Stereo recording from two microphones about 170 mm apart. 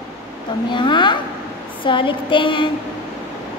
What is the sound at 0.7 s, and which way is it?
A woman's voice, 30° left (ahead or behind).